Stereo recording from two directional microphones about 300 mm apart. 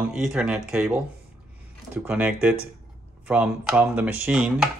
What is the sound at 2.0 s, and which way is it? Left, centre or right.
Speech, centre.